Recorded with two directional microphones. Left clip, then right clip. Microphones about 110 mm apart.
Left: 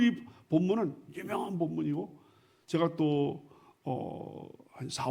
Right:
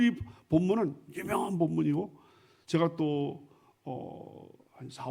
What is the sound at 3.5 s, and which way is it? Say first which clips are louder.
Speech: left 4 dB; 20° left (ahead or behind).